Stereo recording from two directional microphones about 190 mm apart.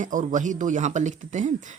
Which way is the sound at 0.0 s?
45° right (ahead or behind).